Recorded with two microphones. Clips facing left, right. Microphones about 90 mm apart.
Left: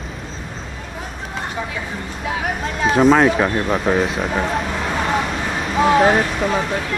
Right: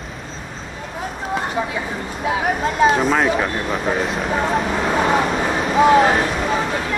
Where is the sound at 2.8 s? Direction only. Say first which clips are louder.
Left 3 dB; centre (ahead or behind).